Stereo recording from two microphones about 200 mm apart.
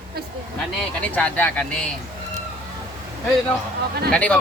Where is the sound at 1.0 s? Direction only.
5° left (ahead or behind).